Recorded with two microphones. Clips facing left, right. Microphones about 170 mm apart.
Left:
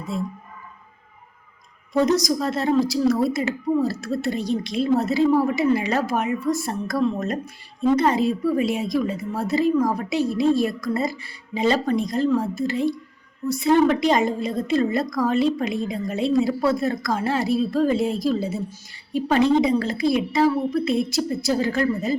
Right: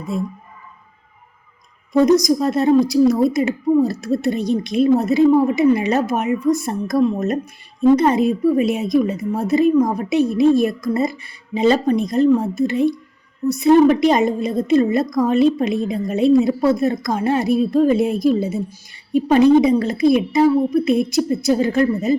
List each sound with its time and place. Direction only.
1.9 s a woman's voice: 15° right (ahead or behind)